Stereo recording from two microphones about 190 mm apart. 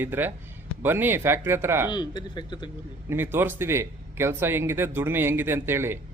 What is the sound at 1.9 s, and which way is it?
Speech, 25° left (ahead or behind).